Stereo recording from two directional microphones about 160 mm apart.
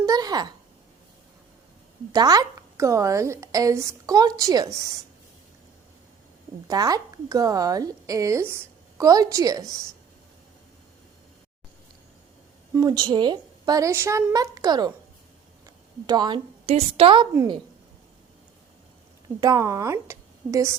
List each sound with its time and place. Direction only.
0.0 s a sound: 25° right (ahead or behind)
2.1 s a woman's voice: 25° right (ahead or behind)
6.7 s a woman's voice: 25° right (ahead or behind)
12.7 s a woman's voice: 25° right (ahead or behind)
16.0 s a woman's voice: 25° right (ahead or behind)
16.6 s a woman's voice: 35° right (ahead or behind)
19.4 s a woman's voice: 20° right (ahead or behind)